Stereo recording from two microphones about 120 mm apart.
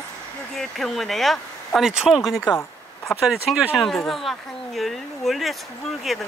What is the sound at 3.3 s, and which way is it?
Speech, 10° right (ahead or behind).